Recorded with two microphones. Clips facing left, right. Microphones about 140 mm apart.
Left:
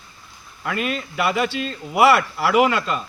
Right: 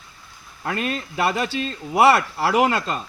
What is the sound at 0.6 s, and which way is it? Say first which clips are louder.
Speech: left 1 dB; 35° right (ahead or behind).